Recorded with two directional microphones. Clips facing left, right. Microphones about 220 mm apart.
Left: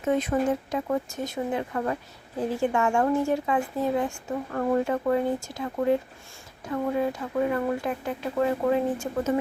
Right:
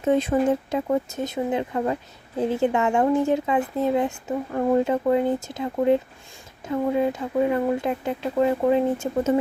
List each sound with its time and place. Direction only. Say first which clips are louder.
0.0 s speech: right 4 dB; 30° right (ahead or behind)